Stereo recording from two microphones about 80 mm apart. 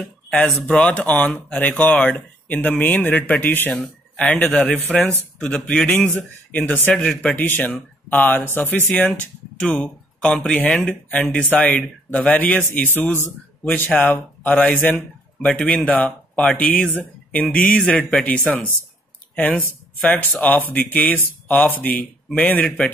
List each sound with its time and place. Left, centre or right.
0.7 s a man's voice: centre
3.7 s speech: centre
4.3 s a man's voice: centre
17.8 s speech: centre
20.0 s a man's voice: centre